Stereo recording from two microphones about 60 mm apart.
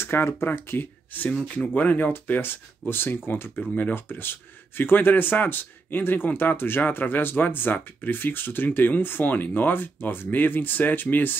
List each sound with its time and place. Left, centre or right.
0.0 s speech: left